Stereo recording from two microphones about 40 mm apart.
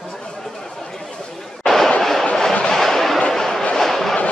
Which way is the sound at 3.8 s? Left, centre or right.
Centre.